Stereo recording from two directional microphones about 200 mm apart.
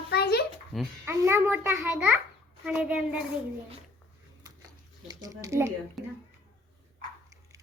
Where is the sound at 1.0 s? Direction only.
10° right (ahead or behind).